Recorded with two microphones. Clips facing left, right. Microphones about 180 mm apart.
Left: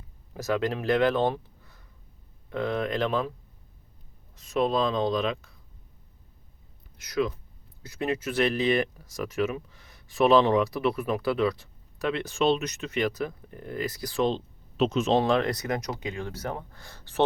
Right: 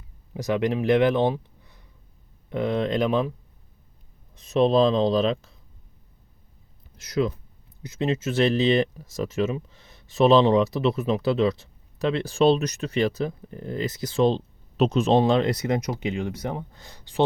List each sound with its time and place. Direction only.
0.3 s speech: 15° right (ahead or behind)
4.4 s speech: 20° right (ahead or behind)
7.0 s speech: 25° right (ahead or behind)